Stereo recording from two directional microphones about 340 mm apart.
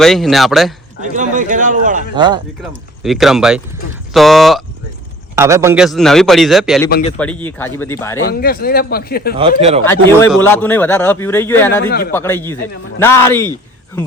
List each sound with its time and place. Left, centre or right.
0.0 s a man's voice: centre
1.1 s speech: right
3.0 s a man's voice: centre
8.3 s a man's voice: left
9.4 s speech: centre
9.8 s a man's voice: centre
11.9 s a man's voice: left
12.1 s speech: centre